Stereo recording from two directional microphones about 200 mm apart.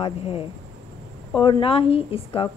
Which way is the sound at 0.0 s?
25° left (ahead or behind).